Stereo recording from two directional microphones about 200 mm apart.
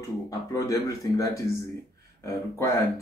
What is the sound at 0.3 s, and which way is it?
Speech, 15° left (ahead or behind).